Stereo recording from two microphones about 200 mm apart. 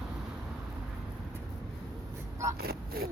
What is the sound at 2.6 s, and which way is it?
Speech, 50° right (ahead or behind).